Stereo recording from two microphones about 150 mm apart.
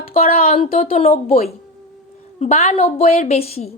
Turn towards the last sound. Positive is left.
turn(degrees=40)  # may be behind; listen again after turning